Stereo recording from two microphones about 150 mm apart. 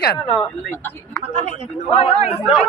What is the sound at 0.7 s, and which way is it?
Speech, 15° left (ahead or behind).